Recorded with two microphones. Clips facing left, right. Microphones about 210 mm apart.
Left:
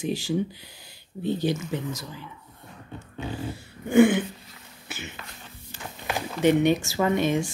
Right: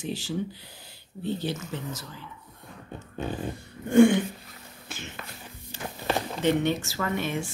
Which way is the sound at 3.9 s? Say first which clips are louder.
Even; 5° left (ahead or behind).